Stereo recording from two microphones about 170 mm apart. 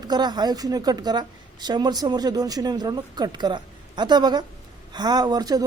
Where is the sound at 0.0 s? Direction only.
25° right (ahead or behind).